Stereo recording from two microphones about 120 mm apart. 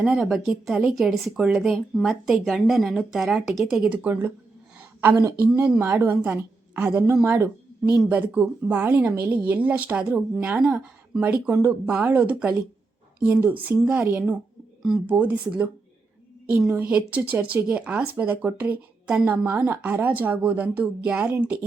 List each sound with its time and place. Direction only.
0.0 s speech: centre (ahead or behind)
5.4 s speech: 15° right (ahead or behind)